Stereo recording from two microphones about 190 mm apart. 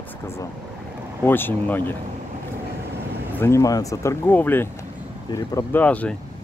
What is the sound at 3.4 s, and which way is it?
Speech, 15° left (ahead or behind).